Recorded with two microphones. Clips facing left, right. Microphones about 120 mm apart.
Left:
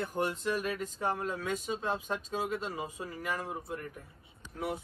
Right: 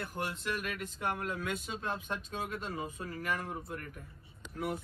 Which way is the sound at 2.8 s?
15° left (ahead or behind).